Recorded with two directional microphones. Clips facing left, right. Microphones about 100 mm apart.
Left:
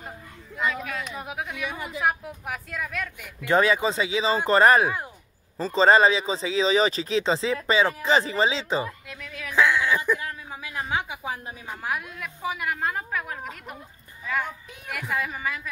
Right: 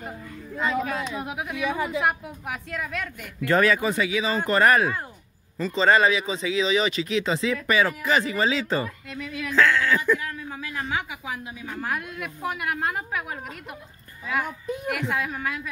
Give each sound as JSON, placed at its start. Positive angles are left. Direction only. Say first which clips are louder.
{"t": 0.6, "sound": "speech", "louder": "right 3 dB", "side_deg": -35}
{"t": 1.1, "sound": "a woman's voice", "louder": "right 3 dB", "side_deg": 0}
{"t": 3.4, "sound": "speech", "louder": "even", "side_deg": 20}
{"t": 9.1, "sound": "a woman's voice", "louder": "right 6 dB", "side_deg": -5}
{"t": 9.5, "sound": "a woman's voice", "louder": "right 1 dB", "side_deg": 15}
{"t": 11.6, "sound": "a woman's voice", "louder": "right 4 dB", "side_deg": 15}
{"t": 11.9, "sound": "a woman's voice", "louder": "left 2 dB", "side_deg": 0}